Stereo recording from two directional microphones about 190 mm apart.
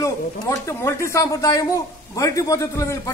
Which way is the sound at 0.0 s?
15° left (ahead or behind).